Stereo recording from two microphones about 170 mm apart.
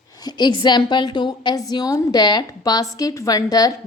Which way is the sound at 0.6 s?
25° left (ahead or behind).